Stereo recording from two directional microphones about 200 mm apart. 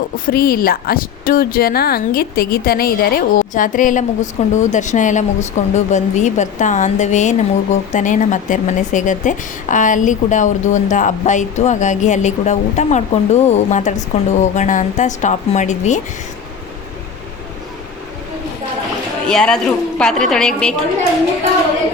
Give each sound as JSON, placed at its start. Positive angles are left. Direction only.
{"t": 0.3, "sound": "speech", "side_deg": 50}
{"t": 19.3, "sound": "a woman's voice", "side_deg": 5}